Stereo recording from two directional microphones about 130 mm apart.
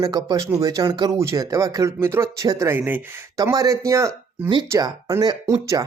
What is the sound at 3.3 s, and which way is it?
Speech, 25° right (ahead or behind).